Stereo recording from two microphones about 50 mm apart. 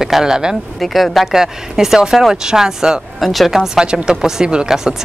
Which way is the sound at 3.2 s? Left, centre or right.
Centre.